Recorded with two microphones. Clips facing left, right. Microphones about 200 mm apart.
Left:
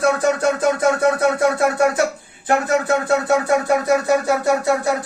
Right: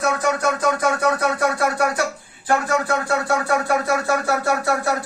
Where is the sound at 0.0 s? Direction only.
30° left (ahead or behind).